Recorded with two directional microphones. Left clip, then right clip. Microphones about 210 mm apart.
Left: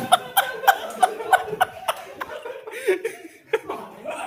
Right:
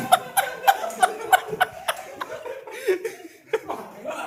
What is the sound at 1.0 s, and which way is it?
Chuckle, 20° right (ahead or behind).